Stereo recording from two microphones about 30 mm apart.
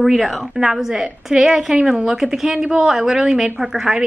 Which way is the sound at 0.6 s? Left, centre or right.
Centre.